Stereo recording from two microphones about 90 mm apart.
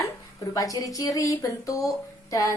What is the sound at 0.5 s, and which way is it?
A woman's voice, 40° left (ahead or behind).